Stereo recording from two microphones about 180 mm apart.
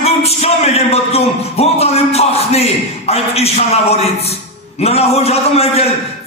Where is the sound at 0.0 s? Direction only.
35° left (ahead or behind).